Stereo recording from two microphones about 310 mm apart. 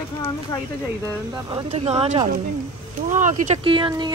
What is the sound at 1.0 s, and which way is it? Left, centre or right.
Speech, centre.